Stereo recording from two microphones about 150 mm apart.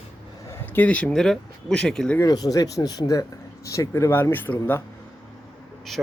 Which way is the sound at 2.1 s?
25° left (ahead or behind).